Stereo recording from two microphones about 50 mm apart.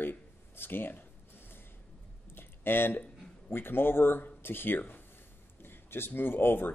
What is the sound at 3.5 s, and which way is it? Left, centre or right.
Speech, left.